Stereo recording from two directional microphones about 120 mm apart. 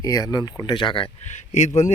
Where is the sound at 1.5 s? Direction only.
75° left (ahead or behind).